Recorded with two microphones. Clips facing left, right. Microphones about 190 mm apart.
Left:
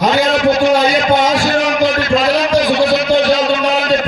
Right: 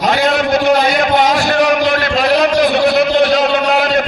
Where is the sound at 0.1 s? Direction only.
60° right (ahead or behind).